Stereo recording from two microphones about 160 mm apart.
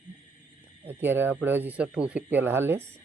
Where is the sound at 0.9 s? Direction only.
15° right (ahead or behind).